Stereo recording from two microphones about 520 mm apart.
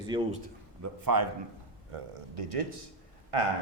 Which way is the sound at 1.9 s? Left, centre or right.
Right.